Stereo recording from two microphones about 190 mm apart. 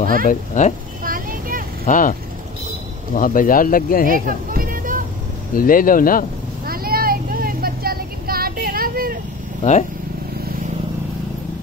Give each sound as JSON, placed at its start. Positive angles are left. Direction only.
{"t": 0.3, "sound": "speech", "side_deg": 40}
{"t": 1.0, "sound": "vehicle", "side_deg": -45}
{"t": 1.9, "sound": "speech", "side_deg": 45}
{"t": 3.2, "sound": "speech", "side_deg": 45}
{"t": 4.3, "sound": "music", "side_deg": -45}
{"t": 5.5, "sound": "speech", "side_deg": 45}
{"t": 6.6, "sound": "vehicle", "side_deg": -50}
{"t": 9.6, "sound": "speech", "side_deg": 40}